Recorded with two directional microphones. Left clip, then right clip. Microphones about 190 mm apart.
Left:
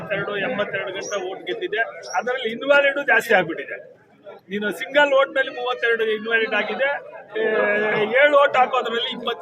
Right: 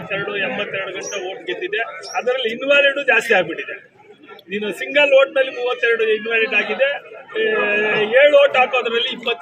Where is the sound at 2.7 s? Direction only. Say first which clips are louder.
Right 2 dB; 20° left (ahead or behind).